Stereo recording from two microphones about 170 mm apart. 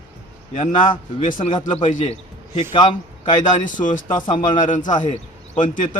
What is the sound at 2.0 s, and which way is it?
A man's voice, 40° left (ahead or behind).